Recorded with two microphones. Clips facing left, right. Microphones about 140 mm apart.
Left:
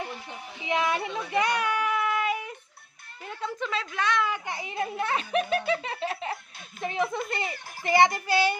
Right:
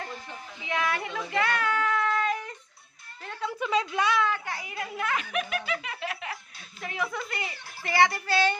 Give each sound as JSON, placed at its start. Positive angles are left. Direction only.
{"t": 0.6, "sound": "a sound", "side_deg": 20}
{"t": 3.6, "sound": "a woman's voice", "side_deg": -15}
{"t": 4.4, "sound": "speech", "side_deg": 25}